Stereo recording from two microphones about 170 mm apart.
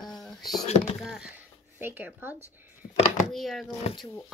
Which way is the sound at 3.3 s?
Centre (ahead or behind).